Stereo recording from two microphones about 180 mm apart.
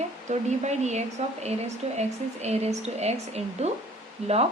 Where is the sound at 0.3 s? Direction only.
40° right (ahead or behind).